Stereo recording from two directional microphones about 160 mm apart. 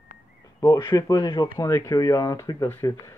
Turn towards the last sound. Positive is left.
turn(degrees=15)  # may be behind; listen again after turning